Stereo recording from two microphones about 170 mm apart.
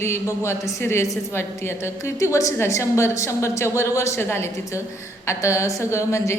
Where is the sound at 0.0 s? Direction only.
15° left (ahead or behind).